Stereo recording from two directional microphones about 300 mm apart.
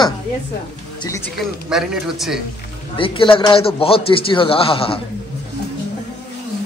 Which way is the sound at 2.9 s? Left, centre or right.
Centre.